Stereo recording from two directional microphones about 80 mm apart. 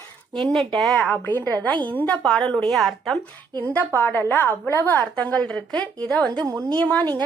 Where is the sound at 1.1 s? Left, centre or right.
Left.